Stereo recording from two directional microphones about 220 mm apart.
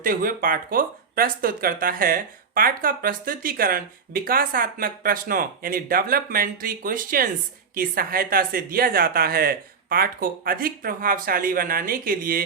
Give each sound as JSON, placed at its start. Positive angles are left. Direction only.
{"t": 0.0, "sound": "speech", "side_deg": -40}